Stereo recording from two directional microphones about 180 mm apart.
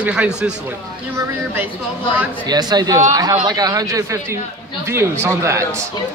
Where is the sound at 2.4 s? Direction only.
20° right (ahead or behind).